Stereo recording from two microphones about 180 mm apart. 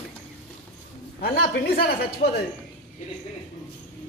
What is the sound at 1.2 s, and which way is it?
Speech, 60° left (ahead or behind).